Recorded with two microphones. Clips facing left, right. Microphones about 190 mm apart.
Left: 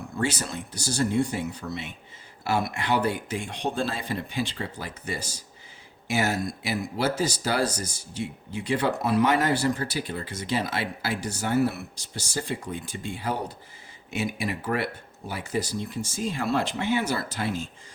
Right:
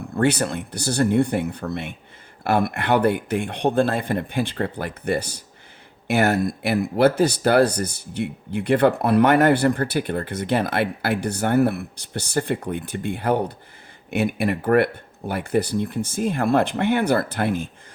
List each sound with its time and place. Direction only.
0.2 s speech: 60° right (ahead or behind)